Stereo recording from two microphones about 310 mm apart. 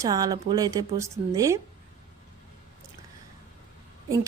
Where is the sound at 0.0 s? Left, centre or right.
Centre.